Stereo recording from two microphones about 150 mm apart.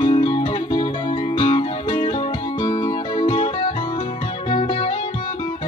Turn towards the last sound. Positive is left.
turn(degrees=40)  # may be behind; listen again after turning